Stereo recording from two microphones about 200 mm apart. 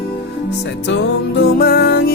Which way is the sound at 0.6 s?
60° left (ahead or behind).